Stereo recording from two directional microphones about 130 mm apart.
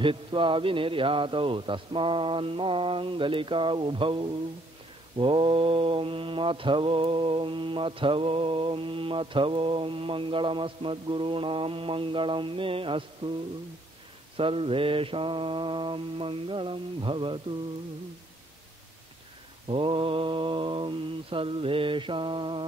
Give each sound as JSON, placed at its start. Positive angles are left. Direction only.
{"t": 0.0, "sound": "a man's voice", "side_deg": -40}
{"t": 5.1, "sound": "mantra", "side_deg": -40}
{"t": 14.3, "sound": "mantra", "side_deg": -45}
{"t": 19.7, "sound": "a man's voice", "side_deg": -45}